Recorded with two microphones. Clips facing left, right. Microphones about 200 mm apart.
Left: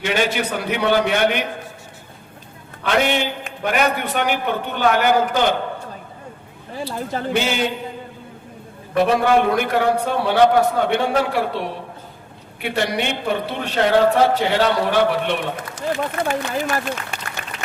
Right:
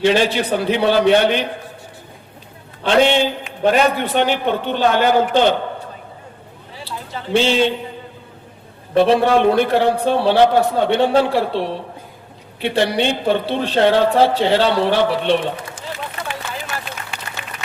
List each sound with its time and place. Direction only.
0.0 s a man's voice: 30° right (ahead or behind)
2.8 s a woman's voice: 30° right (ahead or behind)
6.7 s speech: 50° left (ahead or behind)
7.3 s a woman's voice: 30° right (ahead or behind)
9.0 s a woman's voice: 30° right (ahead or behind)
16.0 s speech: 45° left (ahead or behind)